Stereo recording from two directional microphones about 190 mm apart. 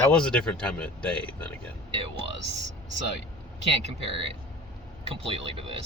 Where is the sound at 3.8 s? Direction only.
30° right (ahead or behind).